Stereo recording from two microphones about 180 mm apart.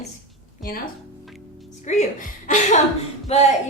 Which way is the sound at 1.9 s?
45° left (ahead or behind).